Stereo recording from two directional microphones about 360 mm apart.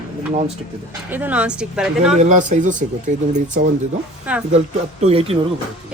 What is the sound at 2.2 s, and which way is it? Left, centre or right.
Speech, centre.